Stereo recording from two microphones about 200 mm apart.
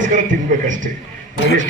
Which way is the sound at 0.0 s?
40° right (ahead or behind).